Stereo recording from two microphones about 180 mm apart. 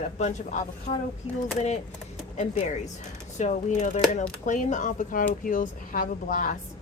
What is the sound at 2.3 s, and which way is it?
A woman's voice, 40° left (ahead or behind).